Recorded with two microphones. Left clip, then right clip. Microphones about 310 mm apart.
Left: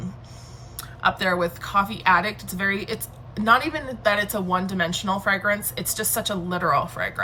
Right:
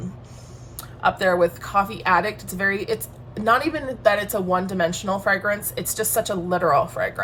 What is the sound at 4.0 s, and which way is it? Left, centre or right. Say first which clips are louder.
A woman's voice: right 3 dB; centre.